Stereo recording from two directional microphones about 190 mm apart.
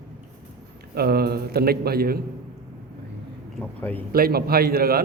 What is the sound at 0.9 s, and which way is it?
A man's voice, 55° right (ahead or behind).